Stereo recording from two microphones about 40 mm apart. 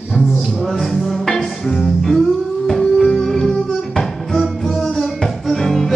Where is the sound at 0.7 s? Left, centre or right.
Centre.